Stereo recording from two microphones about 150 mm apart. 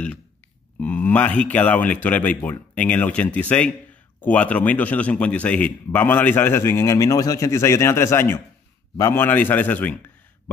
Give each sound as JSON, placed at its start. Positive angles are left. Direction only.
{"t": 0.7, "sound": "a man's voice", "side_deg": 10}